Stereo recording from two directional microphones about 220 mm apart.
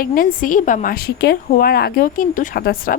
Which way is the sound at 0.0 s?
40° left (ahead or behind).